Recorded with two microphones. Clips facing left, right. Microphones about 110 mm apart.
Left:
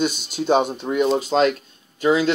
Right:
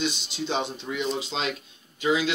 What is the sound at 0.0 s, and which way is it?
Speech, 50° left (ahead or behind).